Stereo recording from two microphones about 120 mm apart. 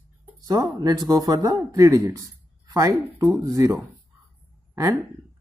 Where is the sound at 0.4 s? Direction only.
30° right (ahead or behind).